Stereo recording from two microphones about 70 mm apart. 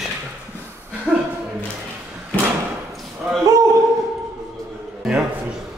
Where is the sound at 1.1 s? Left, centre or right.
Centre.